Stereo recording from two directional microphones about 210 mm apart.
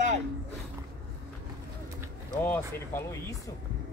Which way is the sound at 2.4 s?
10° left (ahead or behind).